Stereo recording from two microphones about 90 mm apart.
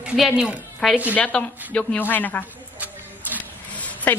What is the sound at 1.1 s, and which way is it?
A woman's voice, 15° left (ahead or behind).